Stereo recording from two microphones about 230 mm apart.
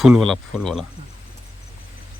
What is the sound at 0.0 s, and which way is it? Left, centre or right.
Speech, centre.